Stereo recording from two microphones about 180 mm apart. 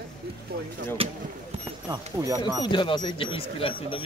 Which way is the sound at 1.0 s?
30° right (ahead or behind).